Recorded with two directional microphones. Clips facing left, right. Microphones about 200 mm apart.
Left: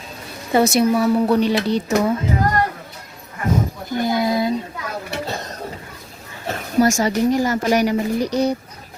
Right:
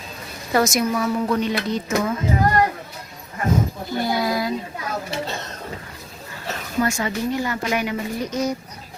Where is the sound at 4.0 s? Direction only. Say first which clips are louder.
Left 3 dB; 20° left (ahead or behind).